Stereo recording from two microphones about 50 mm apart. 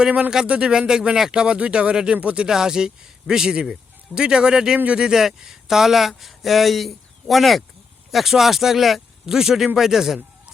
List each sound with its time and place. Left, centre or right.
0.4 s a man's voice: right; by 10.2 s centre